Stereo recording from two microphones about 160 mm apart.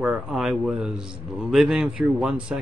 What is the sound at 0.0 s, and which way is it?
A man's voice, 5° right (ahead or behind).